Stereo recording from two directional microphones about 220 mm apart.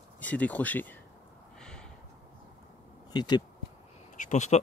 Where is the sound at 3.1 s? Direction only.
20° left (ahead or behind).